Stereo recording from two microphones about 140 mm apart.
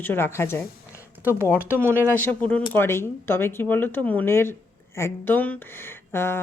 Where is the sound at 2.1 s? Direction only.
10° left (ahead or behind).